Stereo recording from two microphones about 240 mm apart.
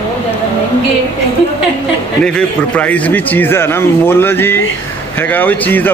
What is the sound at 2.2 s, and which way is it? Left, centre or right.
A man's voice, centre.